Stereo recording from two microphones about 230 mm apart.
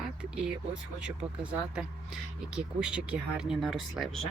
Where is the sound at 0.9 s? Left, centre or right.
Centre.